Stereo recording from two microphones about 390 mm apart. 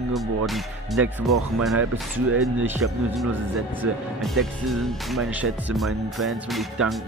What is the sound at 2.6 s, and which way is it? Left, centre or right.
Speech, centre.